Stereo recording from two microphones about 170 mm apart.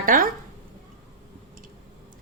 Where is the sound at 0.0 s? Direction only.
55° right (ahead or behind).